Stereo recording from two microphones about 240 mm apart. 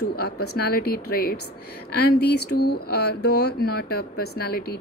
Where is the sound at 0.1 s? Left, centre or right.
Left.